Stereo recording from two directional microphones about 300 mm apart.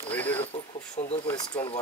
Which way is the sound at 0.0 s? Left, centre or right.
Centre.